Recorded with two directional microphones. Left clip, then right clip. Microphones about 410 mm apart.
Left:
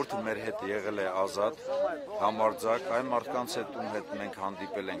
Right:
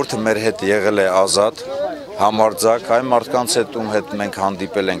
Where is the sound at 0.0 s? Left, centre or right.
Right.